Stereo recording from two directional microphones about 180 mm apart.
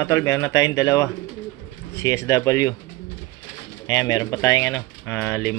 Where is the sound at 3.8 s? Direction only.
20° left (ahead or behind).